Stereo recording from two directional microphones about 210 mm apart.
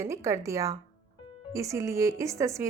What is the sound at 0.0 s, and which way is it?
A woman's voice, 15° right (ahead or behind).